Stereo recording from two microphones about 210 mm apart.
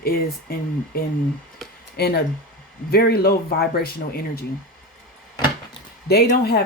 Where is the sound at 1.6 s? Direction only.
Centre (ahead or behind).